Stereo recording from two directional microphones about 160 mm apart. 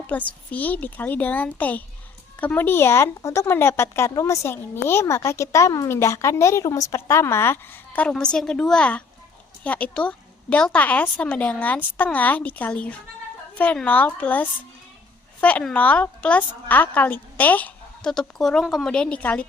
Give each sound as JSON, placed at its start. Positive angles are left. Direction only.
{"t": 0.1, "sound": "speech", "side_deg": 10}